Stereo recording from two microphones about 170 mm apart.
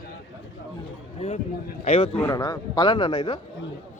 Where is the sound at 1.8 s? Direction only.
35° left (ahead or behind).